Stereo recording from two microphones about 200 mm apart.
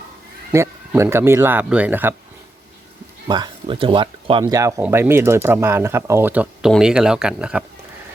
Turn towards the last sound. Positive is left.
turn(degrees=-5)  # may be behind; listen again after turning